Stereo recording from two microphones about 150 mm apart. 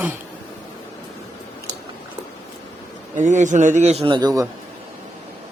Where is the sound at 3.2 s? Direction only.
55° right (ahead or behind); by 4.4 s 25° right (ahead or behind).